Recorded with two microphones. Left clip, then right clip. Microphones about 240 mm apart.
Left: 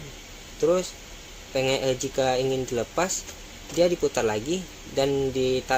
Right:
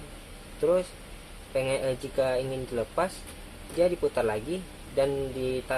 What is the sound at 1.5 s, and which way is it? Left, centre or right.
Speech, left.